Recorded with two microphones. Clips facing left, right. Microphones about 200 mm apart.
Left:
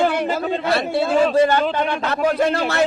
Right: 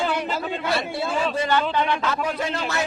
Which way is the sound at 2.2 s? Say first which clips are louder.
Left 8 dB; 65° left (ahead or behind).